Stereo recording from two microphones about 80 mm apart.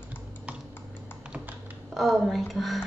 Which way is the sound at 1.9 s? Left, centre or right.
Centre.